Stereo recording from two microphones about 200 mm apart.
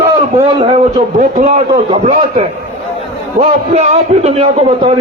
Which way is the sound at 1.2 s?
40° right (ahead or behind).